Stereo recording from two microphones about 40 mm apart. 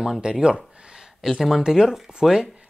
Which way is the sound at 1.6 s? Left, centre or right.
Centre.